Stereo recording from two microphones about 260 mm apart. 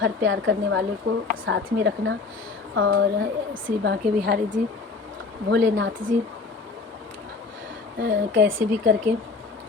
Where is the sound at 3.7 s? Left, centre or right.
Right.